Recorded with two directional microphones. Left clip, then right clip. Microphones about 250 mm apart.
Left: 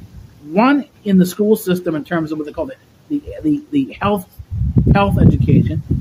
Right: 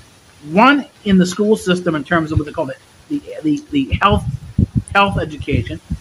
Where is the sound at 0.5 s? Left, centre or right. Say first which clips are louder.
Right 3 dB; centre.